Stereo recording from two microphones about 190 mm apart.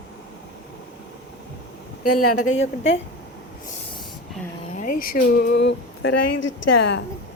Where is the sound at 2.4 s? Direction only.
90° left.